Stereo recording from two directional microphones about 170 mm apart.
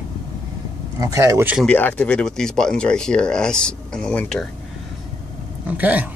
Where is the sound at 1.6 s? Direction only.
10° left (ahead or behind).